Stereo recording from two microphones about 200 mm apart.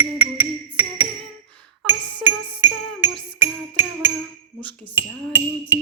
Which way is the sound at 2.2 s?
10° right (ahead or behind).